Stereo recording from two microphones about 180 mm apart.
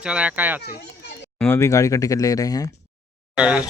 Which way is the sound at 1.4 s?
15° left (ahead or behind).